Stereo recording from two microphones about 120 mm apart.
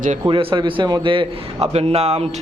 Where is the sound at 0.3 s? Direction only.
40° right (ahead or behind).